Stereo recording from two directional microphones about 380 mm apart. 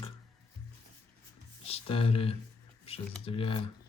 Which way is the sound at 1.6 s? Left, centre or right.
Centre.